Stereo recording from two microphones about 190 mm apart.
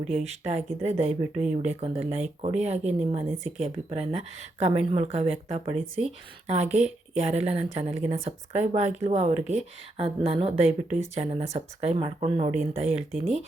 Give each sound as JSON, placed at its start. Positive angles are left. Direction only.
{"t": 0.0, "sound": "speech", "side_deg": -35}
{"t": 7.2, "sound": "speech", "side_deg": -35}